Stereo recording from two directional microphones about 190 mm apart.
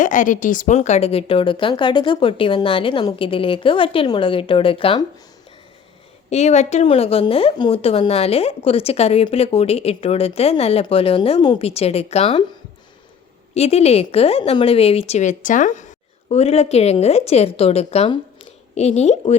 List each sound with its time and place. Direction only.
0.0 s a woman's voice: 40° left (ahead or behind)
6.3 s speech: 35° left (ahead or behind)
13.5 s speech: 35° left (ahead or behind)